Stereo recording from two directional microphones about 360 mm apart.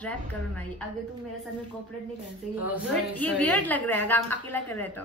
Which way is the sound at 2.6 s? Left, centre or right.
Centre.